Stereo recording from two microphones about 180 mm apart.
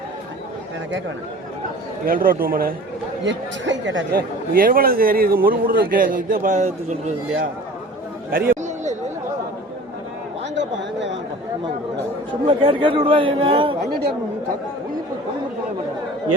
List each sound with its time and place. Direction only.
2.0 s a man's voice: 50° right (ahead or behind)
3.2 s speech: 90° right
4.5 s a man's voice: 55° right (ahead or behind)
8.3 s a sound: 55° right (ahead or behind)
10.5 s a sound: 80° right
12.3 s speech: 30° right (ahead or behind)